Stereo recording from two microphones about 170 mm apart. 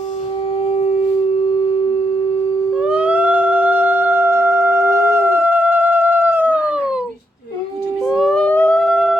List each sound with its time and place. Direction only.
0.6 s wind instrument: 35° left (ahead or behind)
2.7 s music: 5° right (ahead or behind)
8.0 s a sound: centre (ahead or behind)